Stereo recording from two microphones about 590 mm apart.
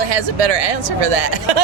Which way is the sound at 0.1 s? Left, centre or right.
Right.